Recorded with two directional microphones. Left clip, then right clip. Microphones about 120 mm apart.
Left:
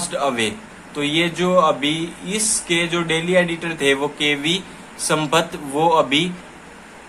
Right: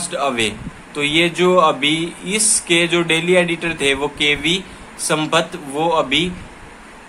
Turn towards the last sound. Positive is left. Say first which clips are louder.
# left 1 dB
turn(degrees=0)  # may be behind; listen again after turning